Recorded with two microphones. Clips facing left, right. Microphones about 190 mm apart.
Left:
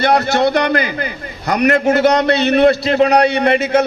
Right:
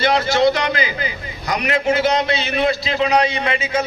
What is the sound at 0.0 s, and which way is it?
A man's voice, 60° left (ahead or behind).